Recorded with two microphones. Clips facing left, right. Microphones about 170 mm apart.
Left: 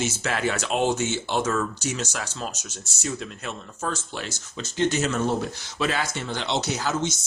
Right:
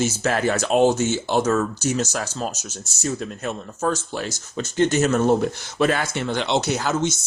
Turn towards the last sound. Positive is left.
turn(degrees=-55)  # may be behind; listen again after turning